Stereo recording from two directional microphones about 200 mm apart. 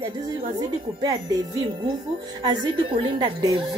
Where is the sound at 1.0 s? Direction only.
20° right (ahead or behind).